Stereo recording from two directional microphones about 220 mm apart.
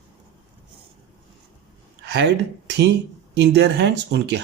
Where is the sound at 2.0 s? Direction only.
50° right (ahead or behind).